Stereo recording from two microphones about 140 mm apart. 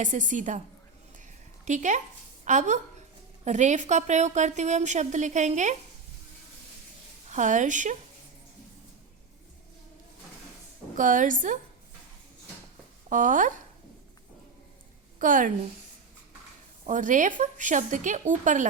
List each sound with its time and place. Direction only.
0.0 s a woman's voice: 65° right (ahead or behind)
1.6 s a woman's voice: 60° right (ahead or behind)
7.3 s a woman's voice: 60° right (ahead or behind)
10.9 s a woman's voice: 70° right (ahead or behind)
13.1 s speech: 70° right (ahead or behind)
15.2 s a woman's voice: 70° right (ahead or behind)
16.8 s a woman's voice: 65° right (ahead or behind)